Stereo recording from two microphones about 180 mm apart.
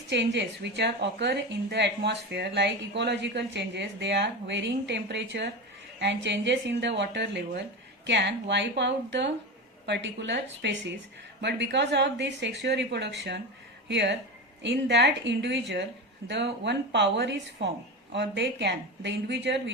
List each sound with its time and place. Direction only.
0.1 s a woman's voice: 75° right (ahead or behind)